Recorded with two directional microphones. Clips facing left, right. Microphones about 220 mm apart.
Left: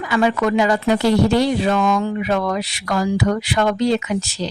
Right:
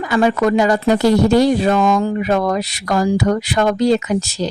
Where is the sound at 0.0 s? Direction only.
40° right (ahead or behind).